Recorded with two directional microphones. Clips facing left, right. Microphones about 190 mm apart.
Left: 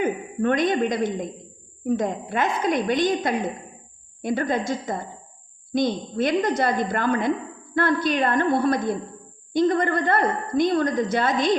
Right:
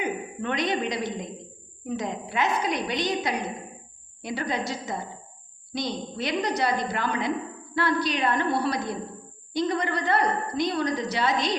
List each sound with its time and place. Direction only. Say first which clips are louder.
0.0 s a woman's voice: left 6 dB; 50° left (ahead or behind)